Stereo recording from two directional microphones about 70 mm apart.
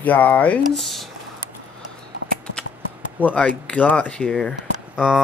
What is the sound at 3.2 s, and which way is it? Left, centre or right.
Speech, left.